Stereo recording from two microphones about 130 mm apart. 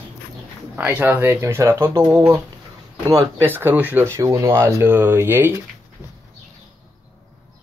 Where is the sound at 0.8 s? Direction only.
15° right (ahead or behind).